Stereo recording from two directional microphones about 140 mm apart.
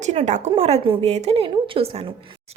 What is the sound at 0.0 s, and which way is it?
Speech, 60° right (ahead or behind).